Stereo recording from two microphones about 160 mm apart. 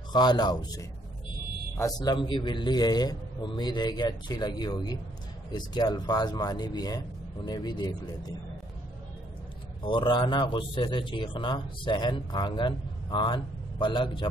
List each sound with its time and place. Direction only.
0.1 s a man's voice: 25° left (ahead or behind)
9.8 s a man's voice: 30° left (ahead or behind)